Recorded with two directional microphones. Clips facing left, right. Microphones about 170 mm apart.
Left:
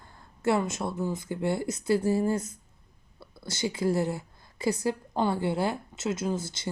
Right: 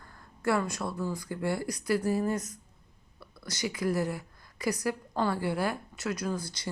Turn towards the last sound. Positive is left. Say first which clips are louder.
# left 3 dB
turn(degrees=25)  # may be behind; listen again after turning